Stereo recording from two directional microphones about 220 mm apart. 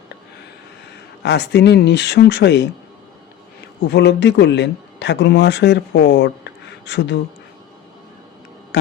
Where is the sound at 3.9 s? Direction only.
50° left (ahead or behind).